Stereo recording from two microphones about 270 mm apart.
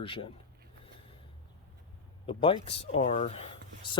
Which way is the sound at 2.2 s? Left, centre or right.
Centre.